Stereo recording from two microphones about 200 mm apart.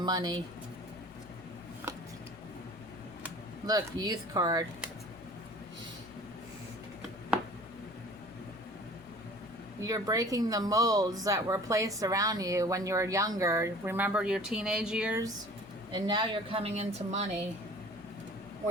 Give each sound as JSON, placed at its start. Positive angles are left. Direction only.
{"t": 0.0, "sound": "speech", "side_deg": -20}
{"t": 3.7, "sound": "speech", "side_deg": -20}
{"t": 9.8, "sound": "speech", "side_deg": -15}
{"t": 15.9, "sound": "speech", "side_deg": -20}